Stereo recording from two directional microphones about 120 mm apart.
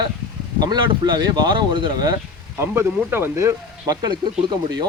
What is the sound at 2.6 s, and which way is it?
Speech, 20° right (ahead or behind).